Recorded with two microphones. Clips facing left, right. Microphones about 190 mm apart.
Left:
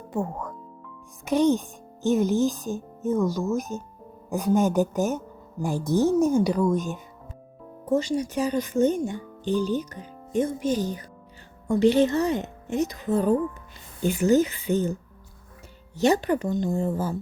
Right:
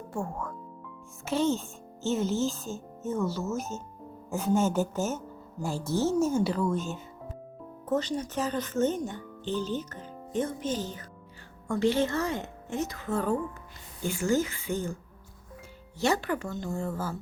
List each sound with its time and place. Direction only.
0.1 s speech: 20° left (ahead or behind)
16.0 s speech: 20° left (ahead or behind)